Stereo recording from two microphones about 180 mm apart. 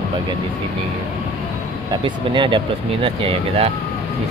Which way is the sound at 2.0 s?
25° right (ahead or behind).